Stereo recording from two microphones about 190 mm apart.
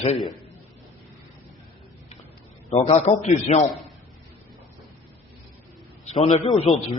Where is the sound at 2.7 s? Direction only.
35° left (ahead or behind).